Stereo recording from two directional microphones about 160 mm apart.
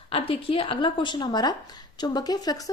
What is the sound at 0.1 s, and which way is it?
A woman's voice, 35° left (ahead or behind).